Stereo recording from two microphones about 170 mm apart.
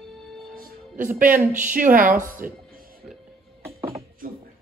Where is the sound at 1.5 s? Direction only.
50° right (ahead or behind).